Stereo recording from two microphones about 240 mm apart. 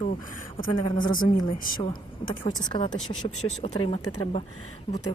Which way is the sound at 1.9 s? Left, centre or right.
Left.